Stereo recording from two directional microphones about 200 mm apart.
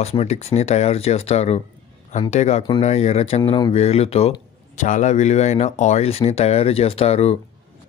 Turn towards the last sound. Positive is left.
turn(degrees=30)  # may be behind; listen again after turning